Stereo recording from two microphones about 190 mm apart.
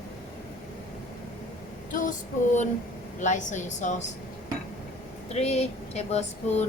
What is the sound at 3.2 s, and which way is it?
Speech, 40° left (ahead or behind).